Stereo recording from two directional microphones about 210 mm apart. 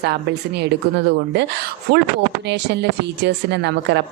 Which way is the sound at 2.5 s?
55° right (ahead or behind).